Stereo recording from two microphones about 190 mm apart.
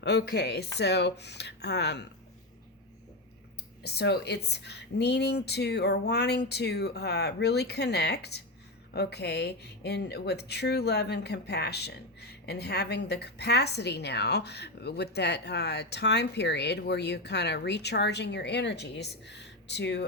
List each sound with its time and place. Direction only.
0.0 s a woman's voice: 60° left (ahead or behind)
3.8 s a woman's voice: 60° left (ahead or behind)